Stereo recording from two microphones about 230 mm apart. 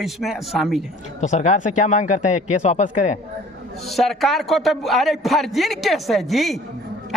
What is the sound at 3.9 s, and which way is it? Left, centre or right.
Speech, centre.